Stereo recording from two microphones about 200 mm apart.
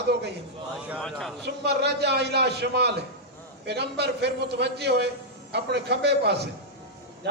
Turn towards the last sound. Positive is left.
turn(degrees=-55)  # may be behind; listen again after turning